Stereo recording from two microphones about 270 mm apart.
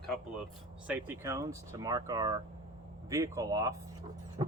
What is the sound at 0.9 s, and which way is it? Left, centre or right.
Speech, centre.